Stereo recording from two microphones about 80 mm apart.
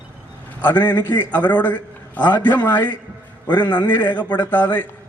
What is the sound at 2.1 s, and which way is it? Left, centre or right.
A man's voice, left.